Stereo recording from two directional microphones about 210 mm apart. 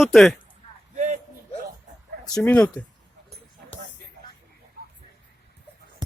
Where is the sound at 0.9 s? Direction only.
35° right (ahead or behind).